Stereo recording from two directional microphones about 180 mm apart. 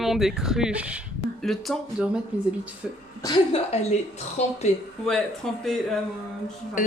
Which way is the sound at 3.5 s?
35° left (ahead or behind).